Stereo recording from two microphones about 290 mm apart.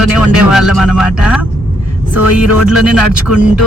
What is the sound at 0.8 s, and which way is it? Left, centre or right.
Speech, centre.